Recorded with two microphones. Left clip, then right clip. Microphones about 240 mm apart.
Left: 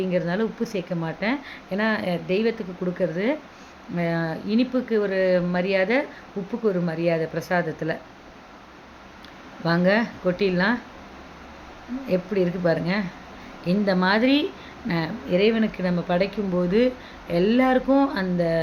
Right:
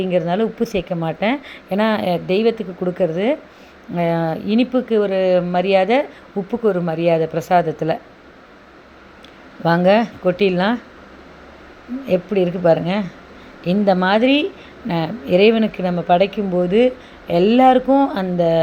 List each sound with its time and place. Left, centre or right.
0.0 s speech: centre
9.6 s speech: centre
12.0 s speech: centre